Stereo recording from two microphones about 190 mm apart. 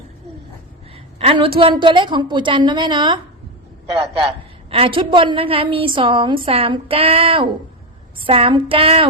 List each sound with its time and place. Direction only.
1.2 s a woman's voice: 30° right (ahead or behind)
4.7 s a woman's voice: 30° right (ahead or behind)